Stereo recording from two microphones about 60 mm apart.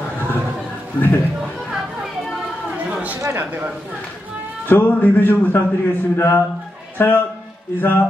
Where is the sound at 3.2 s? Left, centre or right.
Right.